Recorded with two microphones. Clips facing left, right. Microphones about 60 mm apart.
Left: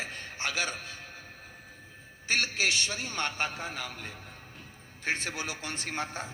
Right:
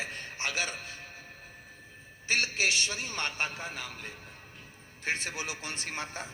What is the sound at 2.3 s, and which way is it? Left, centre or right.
Speech, right.